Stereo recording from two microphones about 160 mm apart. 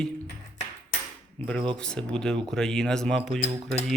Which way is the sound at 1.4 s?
10° left (ahead or behind).